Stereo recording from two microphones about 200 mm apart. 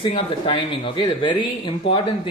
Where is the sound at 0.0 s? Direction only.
25° left (ahead or behind).